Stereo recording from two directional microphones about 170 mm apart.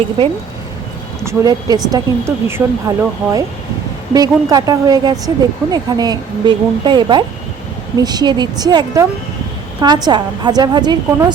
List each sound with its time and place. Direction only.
1.2 s speech: 15° right (ahead or behind)